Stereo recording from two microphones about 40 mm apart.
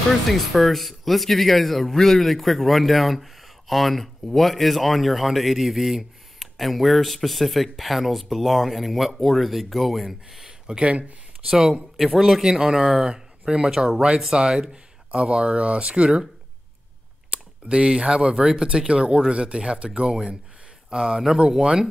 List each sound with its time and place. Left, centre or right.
0.3 s a man's voice: centre
10.7 s speech: right
11.4 s speech: centre
13.7 s speech: centre
14.3 s speech: right
17.3 s speech: right